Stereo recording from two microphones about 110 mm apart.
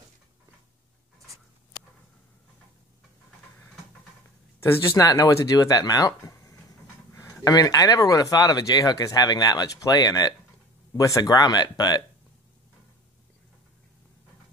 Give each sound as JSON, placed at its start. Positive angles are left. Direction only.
{"t": 4.6, "sound": "speech", "side_deg": 30}